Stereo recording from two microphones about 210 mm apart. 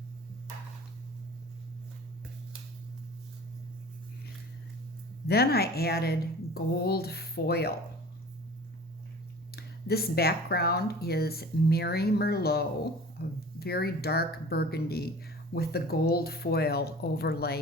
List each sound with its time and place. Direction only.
5.2 s speech: 50° left (ahead or behind)
9.6 s speech: 50° left (ahead or behind)